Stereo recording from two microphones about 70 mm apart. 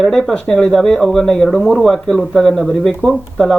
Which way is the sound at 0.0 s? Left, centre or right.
Centre.